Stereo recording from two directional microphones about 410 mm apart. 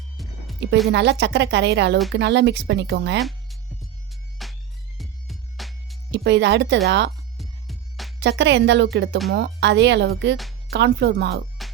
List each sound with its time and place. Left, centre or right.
0.2 s music: centre
0.9 s speech: right
3.2 s music: centre
6.1 s speech: right
7.3 s music: centre
8.2 s speech: right
11.6 s music: centre